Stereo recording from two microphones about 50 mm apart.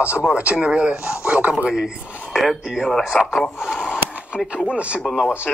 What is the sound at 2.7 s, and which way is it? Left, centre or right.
Speech, centre.